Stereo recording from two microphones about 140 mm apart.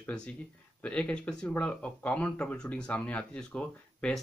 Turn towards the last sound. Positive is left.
turn(degrees=5)  # may be behind; listen again after turning